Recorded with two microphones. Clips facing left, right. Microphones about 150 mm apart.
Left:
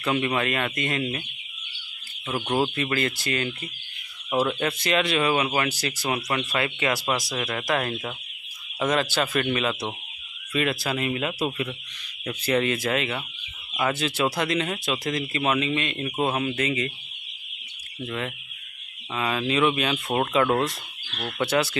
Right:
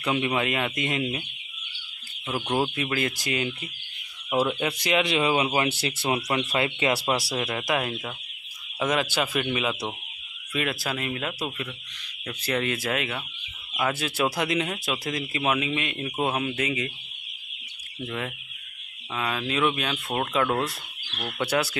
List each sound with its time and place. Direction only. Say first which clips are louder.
0.0 s speech: left 1 dB; 10° right (ahead or behind)
2.2 s speech: left 1 dB; centre (ahead or behind)
18.0 s speech: left 1 dB; 5° right (ahead or behind)
21.2 s speech: left 2 dB; 5° right (ahead or behind)